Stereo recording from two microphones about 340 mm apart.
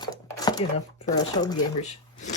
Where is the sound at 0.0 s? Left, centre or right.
Centre.